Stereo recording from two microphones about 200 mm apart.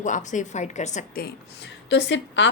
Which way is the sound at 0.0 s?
40° left (ahead or behind).